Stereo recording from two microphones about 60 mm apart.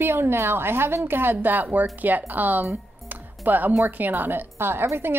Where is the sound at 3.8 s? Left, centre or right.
Right.